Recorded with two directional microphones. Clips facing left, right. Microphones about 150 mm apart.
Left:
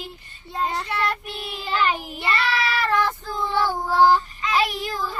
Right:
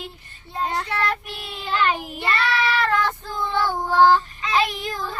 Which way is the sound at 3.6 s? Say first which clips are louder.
Right 1 dB; 5° left (ahead or behind).